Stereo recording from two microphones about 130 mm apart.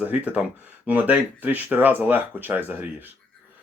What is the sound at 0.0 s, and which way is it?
Speech, 10° right (ahead or behind).